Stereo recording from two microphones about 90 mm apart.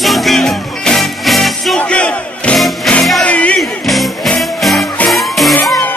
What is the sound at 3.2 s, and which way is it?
Music, 15° left (ahead or behind).